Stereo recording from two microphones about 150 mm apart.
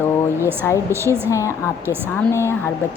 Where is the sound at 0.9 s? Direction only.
20° right (ahead or behind).